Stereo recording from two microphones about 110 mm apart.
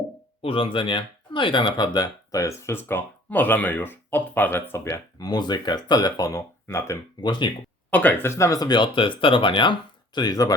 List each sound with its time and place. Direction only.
0.4 s speech: 55° left (ahead or behind); by 4.9 s 20° left (ahead or behind)
5.2 s speech: 40° left (ahead or behind); by 7.0 s 25° left (ahead or behind)
7.2 s speech: 45° left (ahead or behind)
7.9 s speech: 15° left (ahead or behind)
8.3 s speech: 30° left (ahead or behind); by 9.7 s 50° left (ahead or behind)
10.2 s speech: 35° left (ahead or behind)